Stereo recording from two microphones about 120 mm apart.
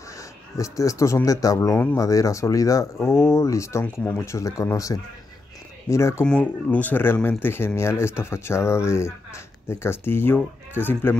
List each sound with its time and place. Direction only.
0.2 s speech: 25° left (ahead or behind)
6.2 s speech: 10° left (ahead or behind)